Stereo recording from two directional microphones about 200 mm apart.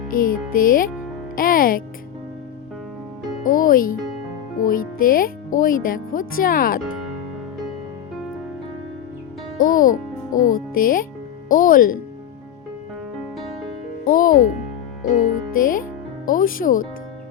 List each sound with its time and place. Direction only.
0.1 s speech: 45° left (ahead or behind)
3.4 s music: 45° left (ahead or behind)
4.6 s speech: 45° left (ahead or behind)
9.6 s a child's voice: 45° left (ahead or behind)
14.0 s music: 45° left (ahead or behind)
15.1 s speech: 40° left (ahead or behind)